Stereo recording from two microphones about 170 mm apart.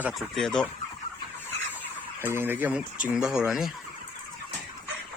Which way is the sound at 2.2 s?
15° right (ahead or behind).